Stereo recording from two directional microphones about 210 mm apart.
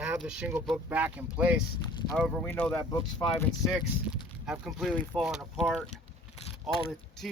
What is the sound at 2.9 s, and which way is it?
Speech, 20° left (ahead or behind).